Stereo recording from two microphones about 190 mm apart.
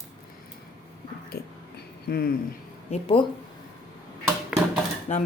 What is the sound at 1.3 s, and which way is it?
Dog, 55° left (ahead or behind).